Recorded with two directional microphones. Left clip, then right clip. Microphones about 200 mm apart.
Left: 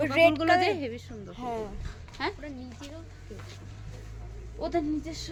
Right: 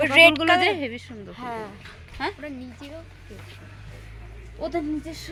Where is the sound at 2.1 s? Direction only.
45° right (ahead or behind).